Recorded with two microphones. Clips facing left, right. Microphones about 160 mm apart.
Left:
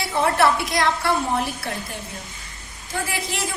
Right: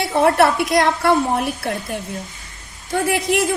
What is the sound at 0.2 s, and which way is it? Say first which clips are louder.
A woman's voice: right 4 dB; 55° right (ahead or behind).